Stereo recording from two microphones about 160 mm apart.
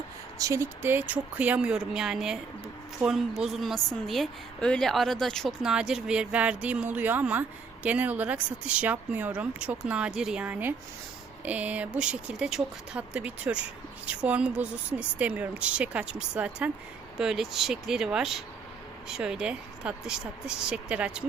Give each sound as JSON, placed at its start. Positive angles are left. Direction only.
{"t": 0.3, "sound": "a woman's voice", "side_deg": -20}